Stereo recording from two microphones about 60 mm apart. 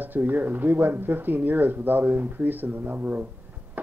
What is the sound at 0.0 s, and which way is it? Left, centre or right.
Speech, right.